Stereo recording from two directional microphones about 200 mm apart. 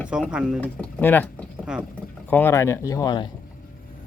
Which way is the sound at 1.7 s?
5° right (ahead or behind).